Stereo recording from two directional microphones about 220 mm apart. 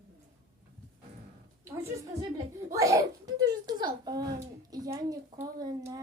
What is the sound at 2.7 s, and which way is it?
A child's voice, 15° right (ahead or behind).